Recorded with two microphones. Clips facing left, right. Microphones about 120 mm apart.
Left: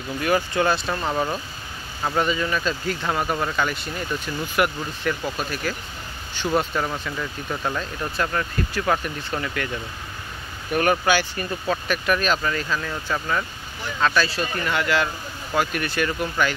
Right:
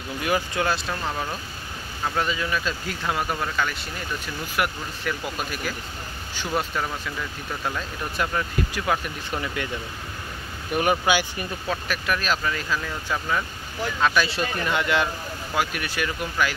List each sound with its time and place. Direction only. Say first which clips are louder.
0.2 s speech: left 3 dB; 5° right (ahead or behind)
1.0 s speech: left 5 dB; 15° left (ahead or behind)
2.0 s speech: left 3 dB; 5° left (ahead or behind)
6.5 s speech: left 3 dB; 5° left (ahead or behind)
8.2 s speech: even; 10° right (ahead or behind)
10.7 s speech: left 2 dB; 10° right (ahead or behind)
11.6 s speech: left 4 dB; centre (ahead or behind); by 15.0 s 20° right (ahead or behind)
15.5 s speech: left 3 dB; 5° right (ahead or behind)